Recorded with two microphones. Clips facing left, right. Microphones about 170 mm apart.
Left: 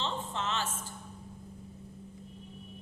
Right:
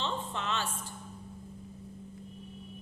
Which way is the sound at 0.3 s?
20° left (ahead or behind).